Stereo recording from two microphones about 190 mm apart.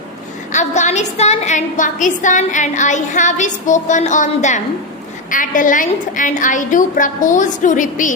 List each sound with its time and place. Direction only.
0.5 s a woman's voice: 40° left (ahead or behind)